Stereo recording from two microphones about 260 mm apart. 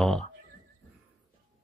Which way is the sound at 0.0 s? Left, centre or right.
Centre.